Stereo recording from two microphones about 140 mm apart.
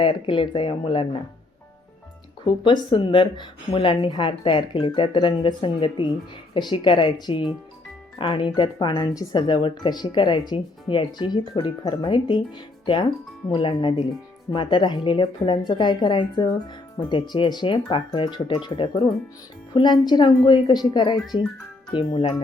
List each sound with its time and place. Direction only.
0.0 s speech: 35° left (ahead or behind)
2.4 s speech: 35° left (ahead or behind)